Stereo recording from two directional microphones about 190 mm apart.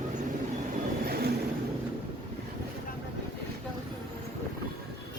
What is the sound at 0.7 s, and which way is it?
Vehicle, 55° right (ahead or behind).